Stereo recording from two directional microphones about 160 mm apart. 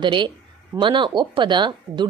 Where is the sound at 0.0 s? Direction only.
30° right (ahead or behind).